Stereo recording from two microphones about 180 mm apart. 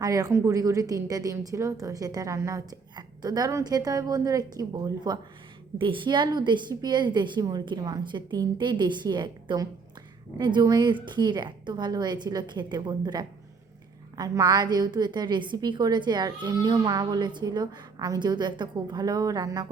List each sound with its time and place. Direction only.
0.0 s a woman's voice: 20° right (ahead or behind)